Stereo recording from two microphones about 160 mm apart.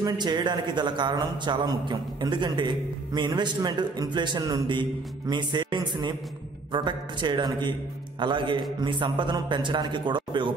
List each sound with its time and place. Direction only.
0.0 s speech: 25° right (ahead or behind)